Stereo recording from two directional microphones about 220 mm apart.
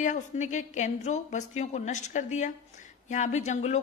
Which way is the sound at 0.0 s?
35° left (ahead or behind).